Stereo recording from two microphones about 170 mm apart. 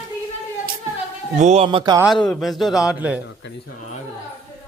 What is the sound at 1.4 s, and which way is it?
Speech, 40° right (ahead or behind).